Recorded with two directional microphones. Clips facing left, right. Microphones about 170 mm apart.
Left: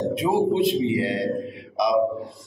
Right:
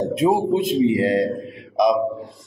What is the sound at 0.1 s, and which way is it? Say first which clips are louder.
Speech: right 4 dB; 45° right (ahead or behind).